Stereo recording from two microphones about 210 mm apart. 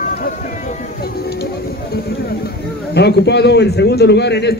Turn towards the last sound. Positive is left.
turn(degrees=50)  # may be behind; listen again after turning